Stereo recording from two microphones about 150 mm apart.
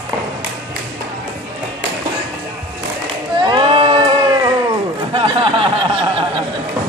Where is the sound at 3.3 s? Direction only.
35° right (ahead or behind).